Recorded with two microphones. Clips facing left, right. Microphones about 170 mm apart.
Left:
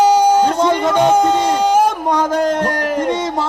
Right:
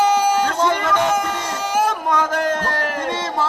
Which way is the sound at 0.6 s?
30° left (ahead or behind).